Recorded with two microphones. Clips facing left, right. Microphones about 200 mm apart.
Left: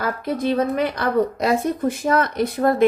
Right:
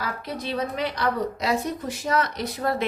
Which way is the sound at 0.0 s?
50° left (ahead or behind).